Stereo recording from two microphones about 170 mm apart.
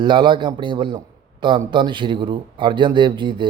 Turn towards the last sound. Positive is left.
turn(degrees=-30)  # may be behind; listen again after turning